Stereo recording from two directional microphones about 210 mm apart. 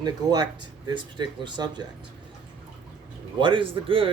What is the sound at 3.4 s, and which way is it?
Speech, 25° right (ahead or behind).